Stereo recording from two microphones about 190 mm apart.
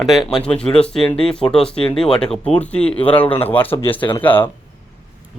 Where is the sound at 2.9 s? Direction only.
30° left (ahead or behind).